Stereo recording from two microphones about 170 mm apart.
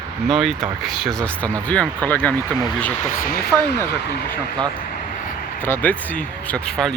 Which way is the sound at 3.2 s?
65° left (ahead or behind).